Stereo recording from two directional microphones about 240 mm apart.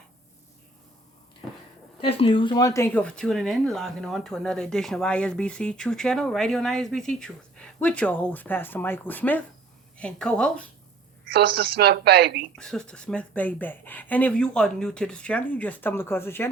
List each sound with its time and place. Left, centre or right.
2.0 s speech: left; by 10.7 s centre
11.3 s a woman's voice: right
12.5 s speech: centre